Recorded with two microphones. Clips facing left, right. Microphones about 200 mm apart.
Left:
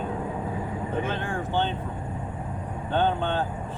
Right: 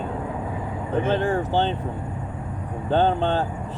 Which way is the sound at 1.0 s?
35° right (ahead or behind).